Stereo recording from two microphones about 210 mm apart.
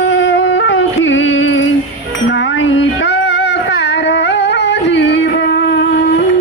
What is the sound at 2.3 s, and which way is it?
Child singing, 65° left (ahead or behind).